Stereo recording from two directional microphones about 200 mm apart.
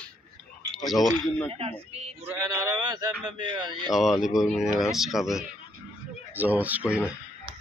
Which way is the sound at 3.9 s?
Centre (ahead or behind).